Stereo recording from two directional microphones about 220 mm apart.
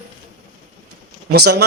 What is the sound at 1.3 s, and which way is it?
Speech, 45° right (ahead or behind).